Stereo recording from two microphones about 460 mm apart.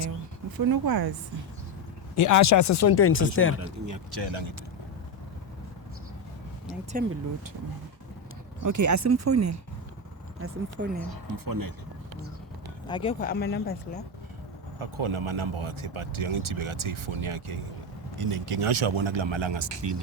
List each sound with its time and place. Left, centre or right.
0.5 s speech: right
2.1 s speech: left
3.6 s speech: right
4.1 s speech: right
7.0 s speech: centre
8.6 s speech: right
10.4 s speech: right
11.4 s speech: right
12.9 s speech: centre
14.8 s speech: right